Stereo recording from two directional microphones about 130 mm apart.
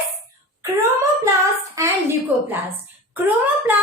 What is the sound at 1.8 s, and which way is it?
Speech, 25° right (ahead or behind).